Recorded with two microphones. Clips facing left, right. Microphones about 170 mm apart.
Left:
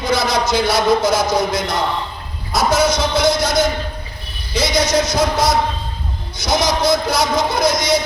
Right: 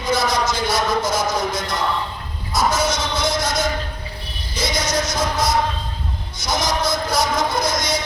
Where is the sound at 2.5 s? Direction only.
70° left (ahead or behind).